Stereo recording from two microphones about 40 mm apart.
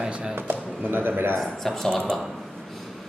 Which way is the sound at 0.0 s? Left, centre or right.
Right.